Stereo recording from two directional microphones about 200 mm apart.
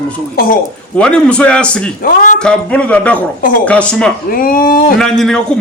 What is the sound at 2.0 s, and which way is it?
Speech, 45° left (ahead or behind).